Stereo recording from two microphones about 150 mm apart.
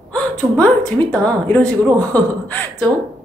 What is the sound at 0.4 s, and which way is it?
Speech, 25° right (ahead or behind).